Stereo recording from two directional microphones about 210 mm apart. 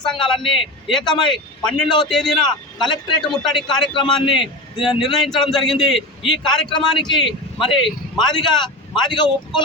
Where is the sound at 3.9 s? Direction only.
25° left (ahead or behind).